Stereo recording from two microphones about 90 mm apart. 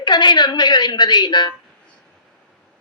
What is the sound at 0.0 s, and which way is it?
A woman's voice, 55° left (ahead or behind).